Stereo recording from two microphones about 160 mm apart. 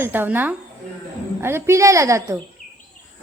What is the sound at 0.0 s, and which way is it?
A woman's voice, 10° right (ahead or behind).